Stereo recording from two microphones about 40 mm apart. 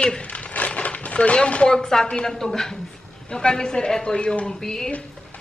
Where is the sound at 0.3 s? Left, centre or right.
Left.